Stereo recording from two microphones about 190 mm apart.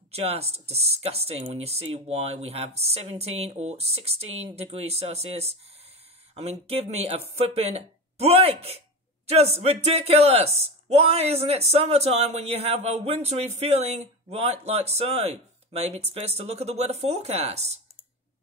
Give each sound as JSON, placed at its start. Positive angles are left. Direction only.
{"t": 0.1, "sound": "speech", "side_deg": -30}